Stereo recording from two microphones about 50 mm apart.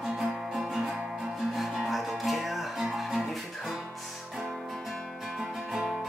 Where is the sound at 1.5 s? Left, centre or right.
Centre.